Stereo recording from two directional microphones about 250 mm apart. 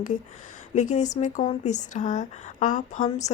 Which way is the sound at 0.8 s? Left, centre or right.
Left.